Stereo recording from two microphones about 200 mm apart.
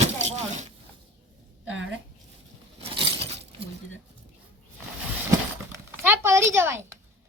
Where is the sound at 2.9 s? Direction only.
25° right (ahead or behind).